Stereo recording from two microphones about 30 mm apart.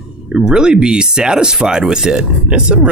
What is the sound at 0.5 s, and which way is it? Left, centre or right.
Speech, right.